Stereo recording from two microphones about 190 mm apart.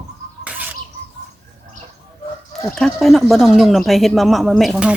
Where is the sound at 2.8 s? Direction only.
Centre (ahead or behind).